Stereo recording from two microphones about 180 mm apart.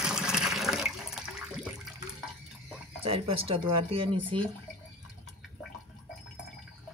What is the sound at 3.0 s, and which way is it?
Speech, 30° right (ahead or behind).